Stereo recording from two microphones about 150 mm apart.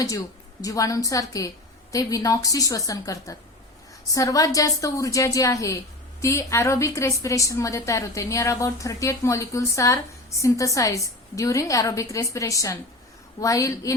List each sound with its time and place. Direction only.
0.6 s a woman's voice: 20° left (ahead or behind)